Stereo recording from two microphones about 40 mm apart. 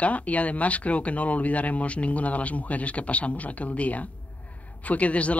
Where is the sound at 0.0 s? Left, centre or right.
Left.